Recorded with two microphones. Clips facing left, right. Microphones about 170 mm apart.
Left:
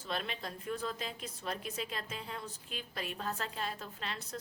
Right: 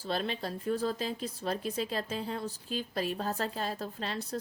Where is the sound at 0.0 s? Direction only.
35° right (ahead or behind).